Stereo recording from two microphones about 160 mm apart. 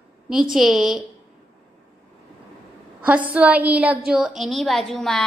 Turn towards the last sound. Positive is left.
turn(degrees=0)  # may be behind; listen again after turning